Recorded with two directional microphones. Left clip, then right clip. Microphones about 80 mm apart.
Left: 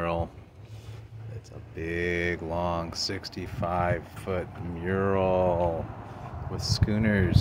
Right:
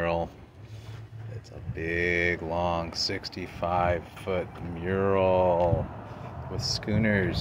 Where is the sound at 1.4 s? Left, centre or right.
Left.